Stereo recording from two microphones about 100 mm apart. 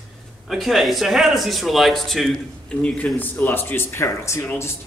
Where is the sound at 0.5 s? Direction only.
Centre (ahead or behind).